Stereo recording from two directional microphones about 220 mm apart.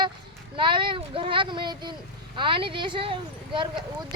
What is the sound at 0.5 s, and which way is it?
Speech, 20° right (ahead or behind).